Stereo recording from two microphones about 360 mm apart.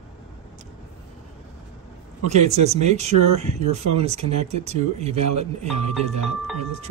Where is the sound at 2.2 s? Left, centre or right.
Centre.